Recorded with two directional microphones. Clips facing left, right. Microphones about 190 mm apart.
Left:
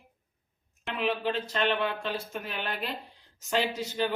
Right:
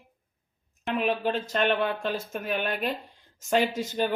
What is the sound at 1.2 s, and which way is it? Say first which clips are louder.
Speech: right 3 dB; 50° right (ahead or behind).